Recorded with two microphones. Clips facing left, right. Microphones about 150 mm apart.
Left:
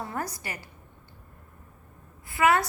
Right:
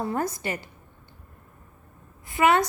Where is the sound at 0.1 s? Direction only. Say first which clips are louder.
Right 6 dB; 25° right (ahead or behind).